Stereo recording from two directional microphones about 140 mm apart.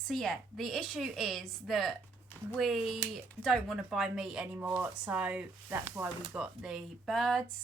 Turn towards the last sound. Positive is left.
turn(degrees=0)  # may be behind; listen again after turning